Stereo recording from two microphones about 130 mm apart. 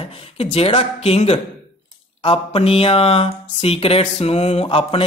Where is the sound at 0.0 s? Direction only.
50° left (ahead or behind).